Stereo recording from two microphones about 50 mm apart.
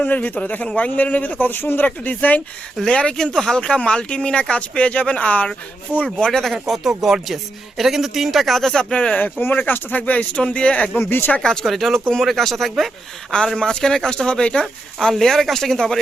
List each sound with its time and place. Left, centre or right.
0.0 s speech: left
2.8 s speech: centre
3.6 s speech: left
6.1 s speech: centre
6.5 s speech: centre; by 9.3 s left
9.4 s speech: left
11.3 s speech: centre
11.6 s speech: centre
13.6 s speech: centre
14.9 s speech: centre